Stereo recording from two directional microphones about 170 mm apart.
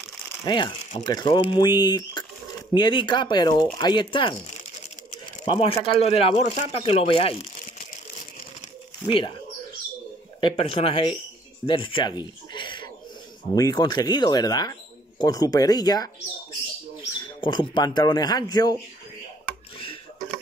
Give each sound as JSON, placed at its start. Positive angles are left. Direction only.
{"t": 0.5, "sound": "speech", "side_deg": 25}
{"t": 9.0, "sound": "speech", "side_deg": 30}
{"t": 10.4, "sound": "speech", "side_deg": 35}
{"t": 11.6, "sound": "a sound", "side_deg": 30}
{"t": 13.6, "sound": "speech", "side_deg": 25}
{"t": 17.2, "sound": "speech", "side_deg": 25}